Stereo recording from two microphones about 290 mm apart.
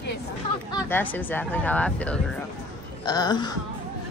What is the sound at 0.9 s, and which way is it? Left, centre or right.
A woman's voice, centre.